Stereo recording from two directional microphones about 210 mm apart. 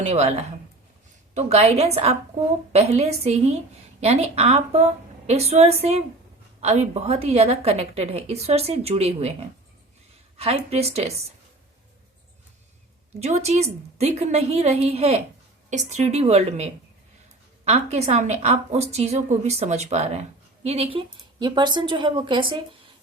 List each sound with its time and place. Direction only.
0.1 s a woman's voice: 30° right (ahead or behind)
10.3 s a woman's voice: 30° right (ahead or behind)
13.1 s a woman's voice: 30° right (ahead or behind)
17.7 s a woman's voice: 30° right (ahead or behind)